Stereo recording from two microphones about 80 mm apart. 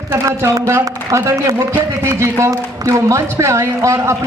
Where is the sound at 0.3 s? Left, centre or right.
Right.